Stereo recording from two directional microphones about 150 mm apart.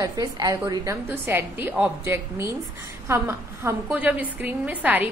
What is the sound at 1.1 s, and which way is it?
A woman's voice, 15° right (ahead or behind).